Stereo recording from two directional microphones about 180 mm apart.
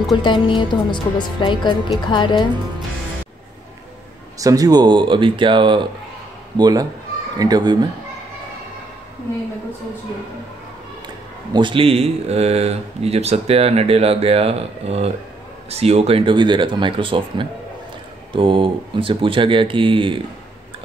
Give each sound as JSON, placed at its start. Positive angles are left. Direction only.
{"t": 0.1, "sound": "speech", "side_deg": 25}
{"t": 4.4, "sound": "speech", "side_deg": -20}
{"t": 11.5, "sound": "speech", "side_deg": -30}